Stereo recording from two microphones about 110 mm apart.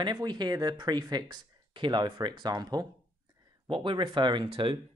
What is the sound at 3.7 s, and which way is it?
Speech, 50° right (ahead or behind).